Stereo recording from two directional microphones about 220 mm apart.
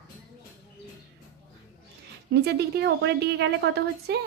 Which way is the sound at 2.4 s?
45° right (ahead or behind).